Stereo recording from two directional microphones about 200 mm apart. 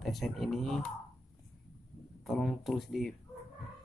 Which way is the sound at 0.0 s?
Centre (ahead or behind).